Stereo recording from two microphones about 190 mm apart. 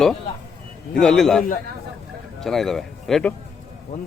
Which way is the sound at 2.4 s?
Centre (ahead or behind).